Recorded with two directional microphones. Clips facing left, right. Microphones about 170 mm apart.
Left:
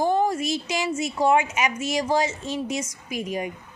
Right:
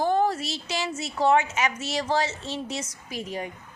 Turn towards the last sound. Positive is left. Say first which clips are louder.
# left 4 dB
turn(degrees=15)  # may be behind; listen again after turning